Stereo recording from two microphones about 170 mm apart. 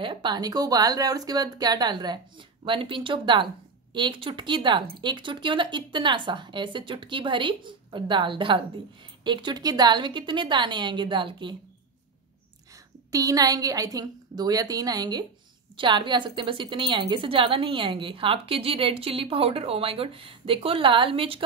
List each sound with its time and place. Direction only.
0.0 s speech: 30° right (ahead or behind)
13.1 s a woman's voice: 20° right (ahead or behind)